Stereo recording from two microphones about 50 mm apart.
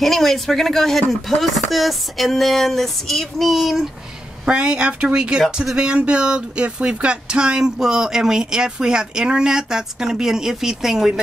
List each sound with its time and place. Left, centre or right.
0.0 s speech: centre
4.5 s speech: centre